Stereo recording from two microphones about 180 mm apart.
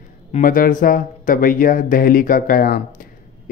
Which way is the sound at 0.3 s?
50° left (ahead or behind).